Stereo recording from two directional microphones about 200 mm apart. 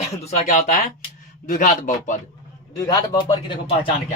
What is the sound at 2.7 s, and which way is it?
Speech, 20° left (ahead or behind).